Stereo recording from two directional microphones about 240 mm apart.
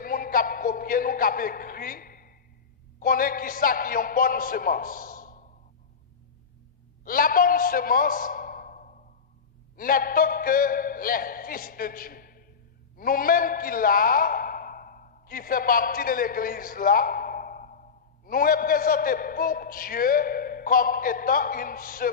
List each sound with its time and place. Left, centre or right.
0.0 s a sound: left
3.0 s a man's voice: left
7.1 s a man's voice: left